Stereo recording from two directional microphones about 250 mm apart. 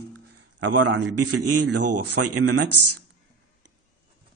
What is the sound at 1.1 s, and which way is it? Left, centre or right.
Speech, right.